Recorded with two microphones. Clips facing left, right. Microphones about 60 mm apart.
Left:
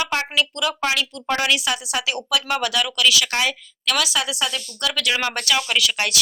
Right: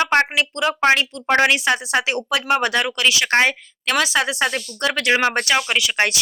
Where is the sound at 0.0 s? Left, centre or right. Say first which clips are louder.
Right 5 dB; right.